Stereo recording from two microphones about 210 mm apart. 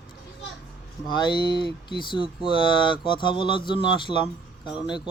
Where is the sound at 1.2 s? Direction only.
20° left (ahead or behind).